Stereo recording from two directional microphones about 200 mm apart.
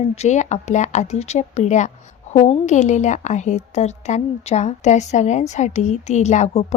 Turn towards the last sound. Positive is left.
turn(degrees=35)  # may be behind; listen again after turning